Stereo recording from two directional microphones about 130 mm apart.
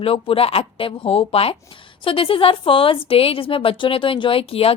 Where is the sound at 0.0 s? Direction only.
45° left (ahead or behind).